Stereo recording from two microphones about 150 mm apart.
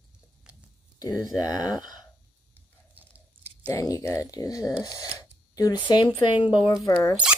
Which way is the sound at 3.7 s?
20° left (ahead or behind).